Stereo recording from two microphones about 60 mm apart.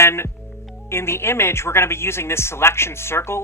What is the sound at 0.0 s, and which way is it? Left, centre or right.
Speech, left.